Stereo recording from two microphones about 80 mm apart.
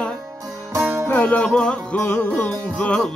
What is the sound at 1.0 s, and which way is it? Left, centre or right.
Music, left.